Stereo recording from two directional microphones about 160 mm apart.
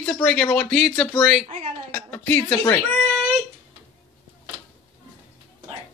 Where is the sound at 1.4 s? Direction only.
40° right (ahead or behind).